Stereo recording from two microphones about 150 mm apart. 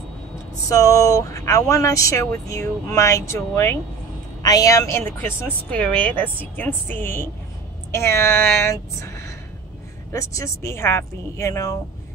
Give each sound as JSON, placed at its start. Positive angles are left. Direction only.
{"t": 0.7, "sound": "speech", "side_deg": 20}